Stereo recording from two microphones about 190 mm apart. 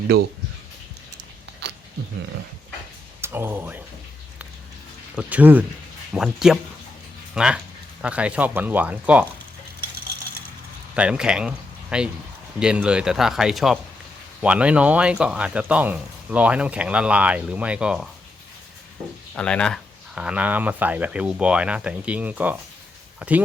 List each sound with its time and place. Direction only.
1.6 s a sound: 60° right (ahead or behind)
3.2 s speech: 10° right (ahead or behind)
5.1 s speech: 10° right (ahead or behind)
10.9 s speech: 5° right (ahead or behind)
19.4 s speech: 5° left (ahead or behind)